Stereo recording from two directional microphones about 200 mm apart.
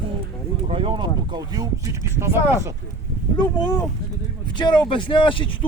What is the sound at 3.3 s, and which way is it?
Speech, 20° left (ahead or behind).